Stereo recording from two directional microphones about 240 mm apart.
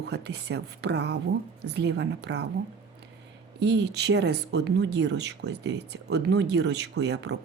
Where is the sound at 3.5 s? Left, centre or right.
Right.